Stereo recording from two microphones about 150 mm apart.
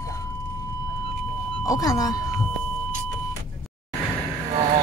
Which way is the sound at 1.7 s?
25° left (ahead or behind).